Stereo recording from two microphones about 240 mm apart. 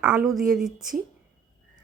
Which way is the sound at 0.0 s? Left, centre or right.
Centre.